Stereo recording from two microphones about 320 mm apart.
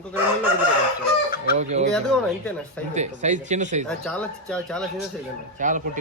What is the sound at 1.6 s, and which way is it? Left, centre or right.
Speech, right.